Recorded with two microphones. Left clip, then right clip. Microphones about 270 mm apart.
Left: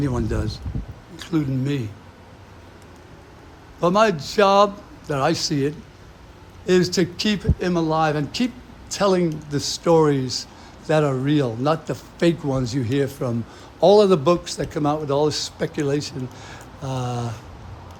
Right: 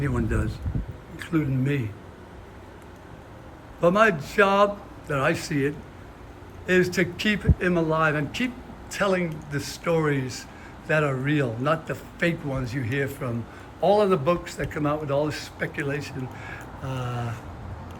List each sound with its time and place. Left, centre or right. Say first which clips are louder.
0.0 s speech: left 3 dB; centre
3.8 s speech: left 2 dB; centre